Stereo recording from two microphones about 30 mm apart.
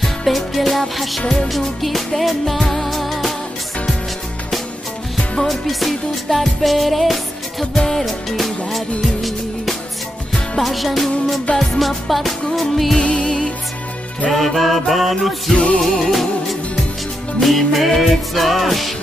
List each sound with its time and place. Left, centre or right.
0.0 s music: centre
5.5 s music: centre
7.7 s music: centre
8.0 s music: centre
13.2 s music: left
14.3 s music: centre
15.5 s music: left
15.8 s music: centre